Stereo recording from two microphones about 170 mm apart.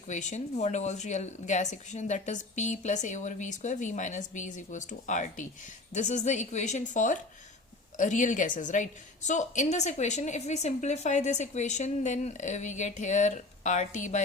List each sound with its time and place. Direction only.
0.1 s a woman's voice: 45° left (ahead or behind)